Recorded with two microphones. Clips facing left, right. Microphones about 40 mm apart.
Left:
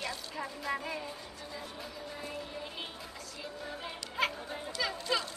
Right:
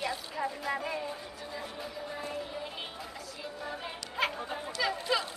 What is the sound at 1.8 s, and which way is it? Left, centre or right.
Music, centre.